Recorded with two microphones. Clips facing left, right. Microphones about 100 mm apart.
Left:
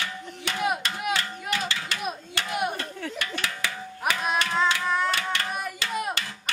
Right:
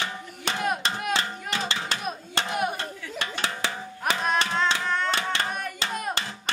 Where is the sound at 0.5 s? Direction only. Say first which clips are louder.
Right 2 dB; 30° right (ahead or behind).